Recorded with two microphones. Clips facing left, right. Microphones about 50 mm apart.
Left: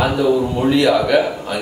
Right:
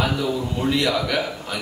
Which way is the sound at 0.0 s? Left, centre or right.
Centre.